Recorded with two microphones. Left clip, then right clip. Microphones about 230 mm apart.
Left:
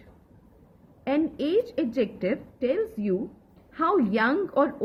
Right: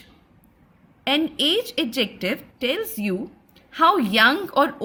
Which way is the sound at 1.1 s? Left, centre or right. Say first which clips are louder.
Right 5 dB; right.